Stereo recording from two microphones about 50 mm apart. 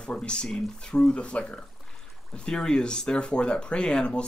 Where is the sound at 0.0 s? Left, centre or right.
Centre.